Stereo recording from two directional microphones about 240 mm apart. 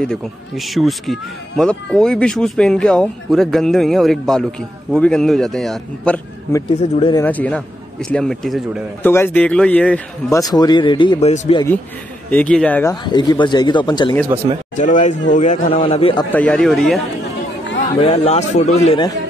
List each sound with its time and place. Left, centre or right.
0.0 s speech: centre
7.0 s a man's voice: centre
7.2 s speech: centre; by 11.6 s left
12.3 s speech: centre
12.9 s speech: centre
14.8 s a man's voice: left
16.3 s speech: centre
18.0 s a man's voice: left